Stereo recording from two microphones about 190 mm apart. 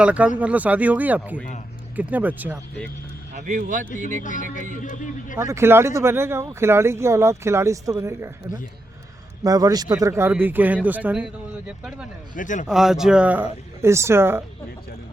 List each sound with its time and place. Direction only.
0.0 s speech: 5° right (ahead or behind)
3.3 s speech: 40° right (ahead or behind)
4.2 s a man's voice: 45° left (ahead or behind)
5.4 s speech: 15° right (ahead or behind)
9.4 s speech: 20° right (ahead or behind)
12.3 s a man's voice: 40° left (ahead or behind)
12.6 s speech: centre (ahead or behind)